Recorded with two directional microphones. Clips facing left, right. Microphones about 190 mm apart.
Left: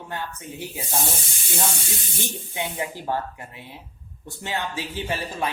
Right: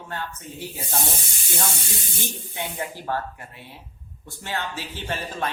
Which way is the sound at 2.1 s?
15° left (ahead or behind).